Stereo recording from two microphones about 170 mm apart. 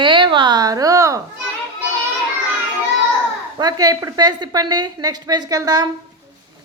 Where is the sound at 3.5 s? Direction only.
25° right (ahead or behind).